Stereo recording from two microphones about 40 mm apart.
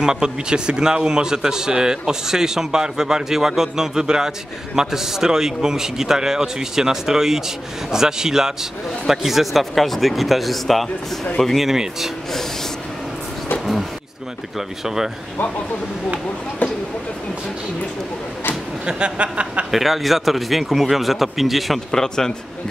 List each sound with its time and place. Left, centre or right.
0.0 s a man's voice: centre
11.7 s a man's voice: centre
18.9 s speech: right
19.7 s speech: centre
21.9 s speech: centre